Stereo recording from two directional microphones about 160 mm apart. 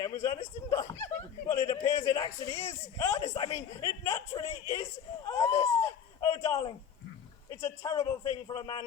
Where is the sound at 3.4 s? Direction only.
40° left (ahead or behind).